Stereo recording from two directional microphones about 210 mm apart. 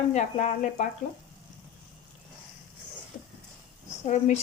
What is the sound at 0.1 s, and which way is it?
Speech, 35° left (ahead or behind).